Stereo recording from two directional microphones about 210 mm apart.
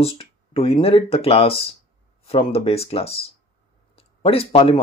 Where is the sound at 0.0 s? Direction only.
25° left (ahead or behind).